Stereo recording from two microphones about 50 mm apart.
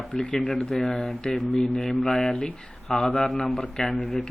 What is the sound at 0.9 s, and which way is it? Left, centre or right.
Speech, centre.